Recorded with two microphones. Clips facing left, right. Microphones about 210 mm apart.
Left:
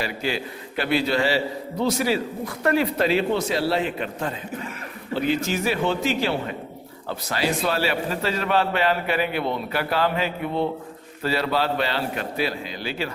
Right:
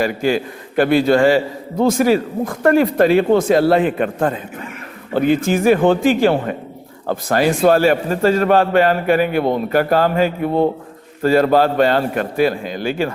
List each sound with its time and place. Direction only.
0.0 s a man's voice: 50° right (ahead or behind)